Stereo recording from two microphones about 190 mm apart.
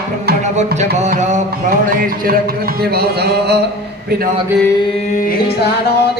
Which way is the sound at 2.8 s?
55° right (ahead or behind).